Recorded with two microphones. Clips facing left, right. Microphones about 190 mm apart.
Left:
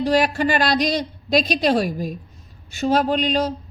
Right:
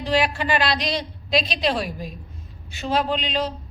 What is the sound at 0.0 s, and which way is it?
A woman's voice, 45° left (ahead or behind).